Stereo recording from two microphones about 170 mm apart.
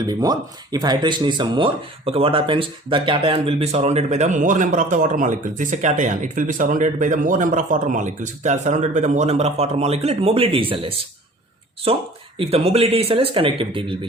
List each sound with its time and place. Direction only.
0.0 s speech: 20° right (ahead or behind)